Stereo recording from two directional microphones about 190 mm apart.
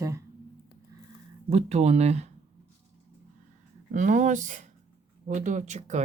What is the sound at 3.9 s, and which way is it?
Speech, 40° right (ahead or behind).